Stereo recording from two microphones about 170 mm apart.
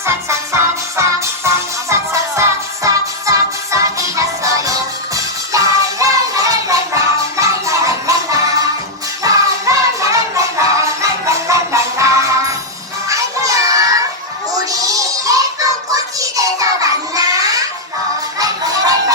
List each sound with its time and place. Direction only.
0.0 s music: 15° right (ahead or behind)
14.6 s child singing: 20° right (ahead or behind)
18.3 s music: 20° right (ahead or behind)